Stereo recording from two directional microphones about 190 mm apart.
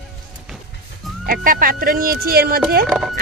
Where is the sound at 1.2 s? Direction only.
50° right (ahead or behind).